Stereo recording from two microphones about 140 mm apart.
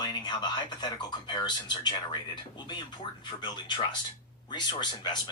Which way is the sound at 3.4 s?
30° left (ahead or behind).